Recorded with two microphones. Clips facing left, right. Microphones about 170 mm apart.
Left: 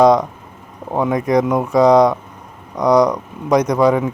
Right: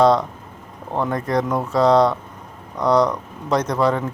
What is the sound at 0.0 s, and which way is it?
Speech, 15° left (ahead or behind).